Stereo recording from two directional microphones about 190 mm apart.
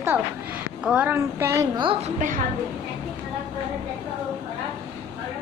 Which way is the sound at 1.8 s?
25° right (ahead or behind).